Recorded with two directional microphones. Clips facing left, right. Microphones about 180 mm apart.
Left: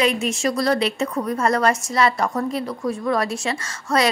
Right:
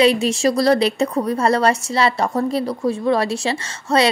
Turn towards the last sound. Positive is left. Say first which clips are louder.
# right 3 dB
turn(degrees=-30)  # may be behind; listen again after turning